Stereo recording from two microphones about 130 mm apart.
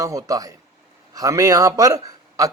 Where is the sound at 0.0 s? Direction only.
25° right (ahead or behind).